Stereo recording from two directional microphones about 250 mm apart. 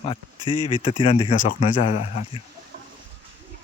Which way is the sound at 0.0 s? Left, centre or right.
Left.